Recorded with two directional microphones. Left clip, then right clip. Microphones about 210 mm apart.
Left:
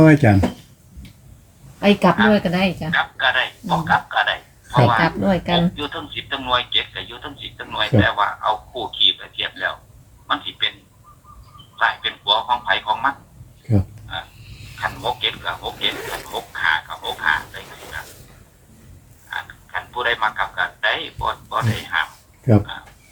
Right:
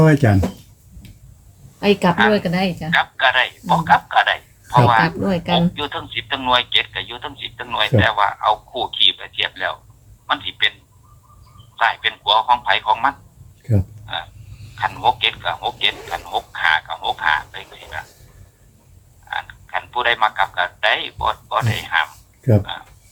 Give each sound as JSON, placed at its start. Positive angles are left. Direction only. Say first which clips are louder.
{"t": 0.0, "sound": "speech", "louder": "left 2 dB", "side_deg": -35}
{"t": 1.8, "sound": "a man's voice", "louder": "even", "side_deg": -40}
{"t": 11.8, "sound": "speech", "louder": "right 2 dB", "side_deg": -40}
{"t": 14.1, "sound": "a sound", "louder": "right 3 dB", "side_deg": -40}
{"t": 14.8, "sound": "a man's voice", "louder": "right 5 dB", "side_deg": -45}
{"t": 19.3, "sound": "speech", "louder": "right 3 dB", "side_deg": -40}